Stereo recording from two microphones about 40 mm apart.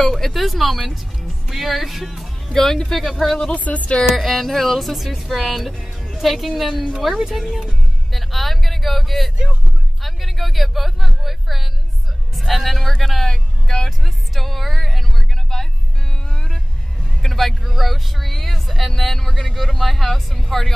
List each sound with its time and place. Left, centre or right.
0.0 s speech: centre
2.5 s speech: centre
3.0 s speech: centre
3.4 s speech: left
4.2 s speech: centre
5.8 s music: centre
6.2 s speech: centre
8.1 s speech: centre
17.2 s speech: centre